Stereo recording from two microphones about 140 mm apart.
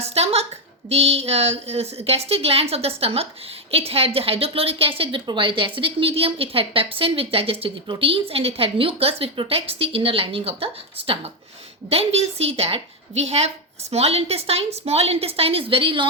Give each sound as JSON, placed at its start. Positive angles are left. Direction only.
{"t": 0.1, "sound": "a woman's voice", "side_deg": -45}